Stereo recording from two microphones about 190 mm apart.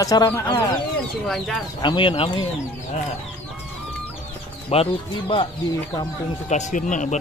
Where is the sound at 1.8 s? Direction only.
25° left (ahead or behind).